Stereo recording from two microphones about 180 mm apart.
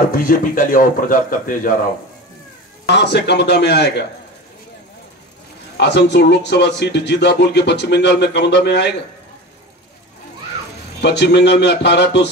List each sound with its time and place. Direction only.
0.1 s a man's voice: 50° left (ahead or behind)
2.9 s speech: 70° left (ahead or behind)
5.8 s speech: 70° left (ahead or behind)
11.0 s speech: 70° left (ahead or behind)